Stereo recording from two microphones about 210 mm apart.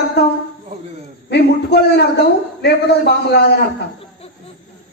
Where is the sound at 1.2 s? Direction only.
50° left (ahead or behind).